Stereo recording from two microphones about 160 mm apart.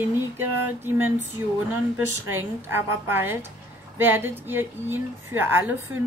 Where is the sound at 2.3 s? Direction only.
15° right (ahead or behind).